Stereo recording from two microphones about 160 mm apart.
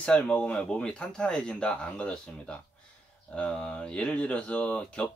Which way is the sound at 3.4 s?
5° left (ahead or behind).